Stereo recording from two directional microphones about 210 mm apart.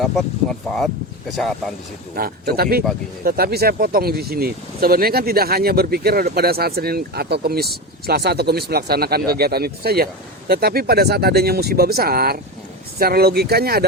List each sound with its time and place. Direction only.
0.7 s speech: 5° left (ahead or behind)
2.1 s speech: 45° right (ahead or behind)